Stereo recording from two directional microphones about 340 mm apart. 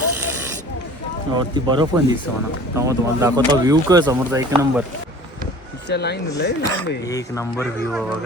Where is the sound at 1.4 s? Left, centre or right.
Centre.